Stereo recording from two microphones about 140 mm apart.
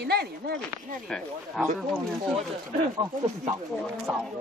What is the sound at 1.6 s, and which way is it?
Speech, centre (ahead or behind).